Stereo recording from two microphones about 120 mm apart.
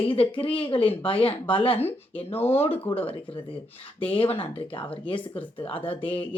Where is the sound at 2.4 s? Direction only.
20° left (ahead or behind).